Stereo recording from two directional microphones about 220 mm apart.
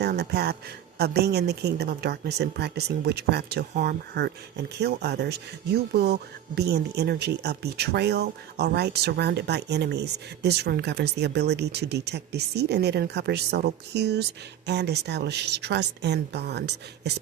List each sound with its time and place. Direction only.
0.0 s speech: 45° right (ahead or behind)